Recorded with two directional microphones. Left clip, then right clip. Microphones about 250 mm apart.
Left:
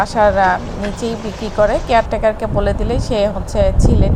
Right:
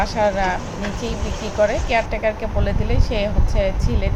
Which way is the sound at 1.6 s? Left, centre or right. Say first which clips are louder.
Left 5 dB; centre.